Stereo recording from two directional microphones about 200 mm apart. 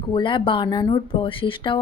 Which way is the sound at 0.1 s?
25° left (ahead or behind).